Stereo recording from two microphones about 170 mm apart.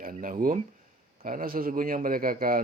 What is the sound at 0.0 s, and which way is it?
A man's voice, 55° right (ahead or behind).